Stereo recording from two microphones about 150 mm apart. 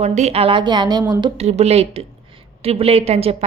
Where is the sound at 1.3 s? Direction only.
45° right (ahead or behind).